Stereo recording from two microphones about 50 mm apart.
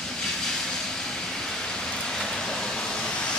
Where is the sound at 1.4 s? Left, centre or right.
Centre.